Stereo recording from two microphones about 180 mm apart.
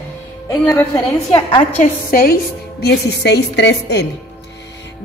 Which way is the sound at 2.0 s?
55° left (ahead or behind).